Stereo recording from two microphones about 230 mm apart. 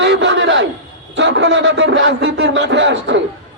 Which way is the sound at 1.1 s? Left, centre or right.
Right.